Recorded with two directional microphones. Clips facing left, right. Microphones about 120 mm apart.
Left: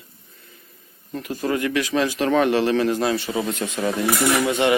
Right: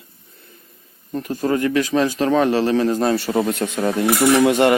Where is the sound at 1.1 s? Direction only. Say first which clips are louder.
Right 4 dB; 35° right (ahead or behind).